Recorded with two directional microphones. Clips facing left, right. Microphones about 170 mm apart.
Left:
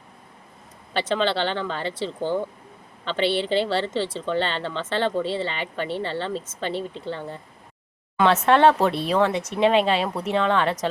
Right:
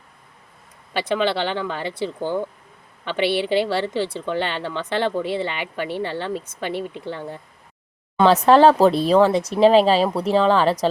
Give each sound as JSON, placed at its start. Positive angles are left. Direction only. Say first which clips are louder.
{"t": 0.9, "sound": "speech", "louder": "right 2 dB", "side_deg": -10}
{"t": 8.1, "sound": "speech", "louder": "right 4 dB", "side_deg": -35}